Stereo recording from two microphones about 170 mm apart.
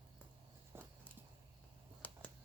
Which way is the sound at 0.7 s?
15° right (ahead or behind).